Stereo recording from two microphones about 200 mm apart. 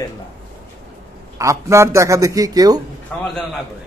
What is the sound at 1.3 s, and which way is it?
Speech, 15° right (ahead or behind).